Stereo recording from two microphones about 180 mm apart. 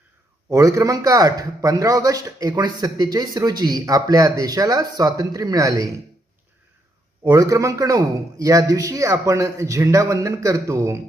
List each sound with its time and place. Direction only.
0.5 s speech: 15° right (ahead or behind)
7.3 s speech: 15° right (ahead or behind)